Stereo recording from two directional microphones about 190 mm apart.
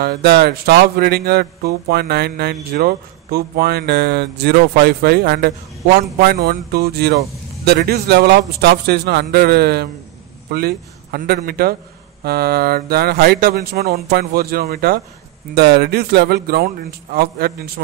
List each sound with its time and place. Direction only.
0.0 s speech: 55° right (ahead or behind)